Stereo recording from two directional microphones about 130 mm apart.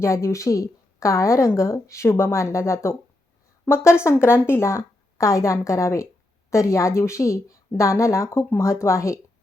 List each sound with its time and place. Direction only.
0.0 s a woman's voice: 20° left (ahead or behind)